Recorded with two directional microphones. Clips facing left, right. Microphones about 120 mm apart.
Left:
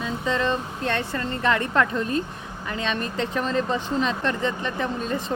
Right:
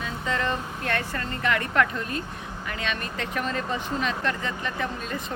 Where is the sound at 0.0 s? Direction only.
25° left (ahead or behind).